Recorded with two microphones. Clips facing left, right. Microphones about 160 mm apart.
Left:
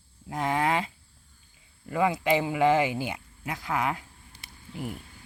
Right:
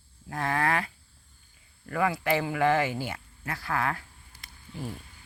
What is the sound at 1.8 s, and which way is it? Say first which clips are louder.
Speech: left 2 dB; 20° left (ahead or behind).